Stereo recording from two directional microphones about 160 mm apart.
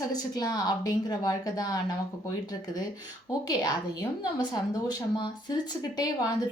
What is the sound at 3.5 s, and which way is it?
Speech, 25° left (ahead or behind).